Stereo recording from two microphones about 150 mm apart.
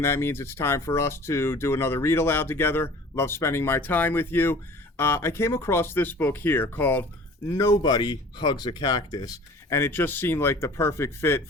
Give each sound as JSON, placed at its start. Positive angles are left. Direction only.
{"t": 0.0, "sound": "speech", "side_deg": 15}
{"t": 7.7, "sound": "speech", "side_deg": 30}